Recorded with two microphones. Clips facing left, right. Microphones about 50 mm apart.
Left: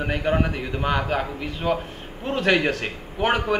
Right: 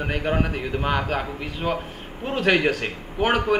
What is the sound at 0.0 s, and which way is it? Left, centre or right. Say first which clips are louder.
A man's voice: left 1 dB; centre.